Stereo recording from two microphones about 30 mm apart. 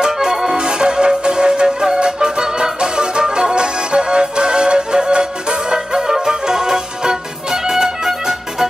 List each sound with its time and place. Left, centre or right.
0.0 s accordion: centre
0.6 s music: right